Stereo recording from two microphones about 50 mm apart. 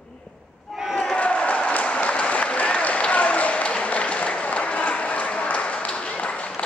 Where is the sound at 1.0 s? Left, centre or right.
Left.